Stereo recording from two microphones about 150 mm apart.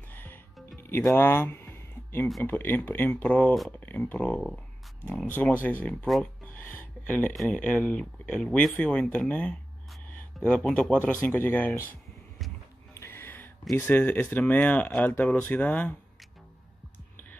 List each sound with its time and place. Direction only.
0.1 s music: 15° left (ahead or behind)
2.4 s speech: 15° left (ahead or behind)
6.5 s a sound: 15° left (ahead or behind)
7.3 s speech: 5° left (ahead or behind)
12.9 s a sound: 15° left (ahead or behind)
13.7 s speech: 10° left (ahead or behind)